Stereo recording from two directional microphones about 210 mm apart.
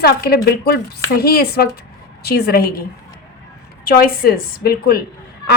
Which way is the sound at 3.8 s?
45° left (ahead or behind).